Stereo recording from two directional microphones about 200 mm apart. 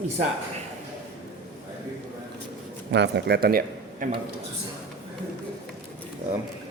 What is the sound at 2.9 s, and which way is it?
A man's voice, 60° right (ahead or behind).